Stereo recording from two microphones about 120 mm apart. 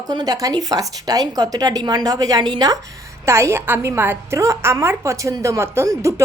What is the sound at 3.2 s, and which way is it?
A woman's voice, 20° right (ahead or behind).